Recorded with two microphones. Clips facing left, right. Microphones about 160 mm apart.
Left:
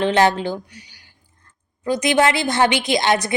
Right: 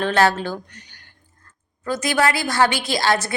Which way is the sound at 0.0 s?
20° left (ahead or behind).